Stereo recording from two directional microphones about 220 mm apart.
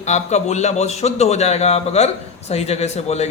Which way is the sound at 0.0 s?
30° left (ahead or behind).